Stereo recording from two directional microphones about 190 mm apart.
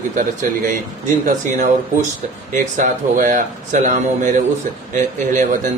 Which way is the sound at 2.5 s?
45° right (ahead or behind).